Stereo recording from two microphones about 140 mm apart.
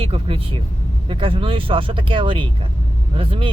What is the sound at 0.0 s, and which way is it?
Speech, 40° right (ahead or behind).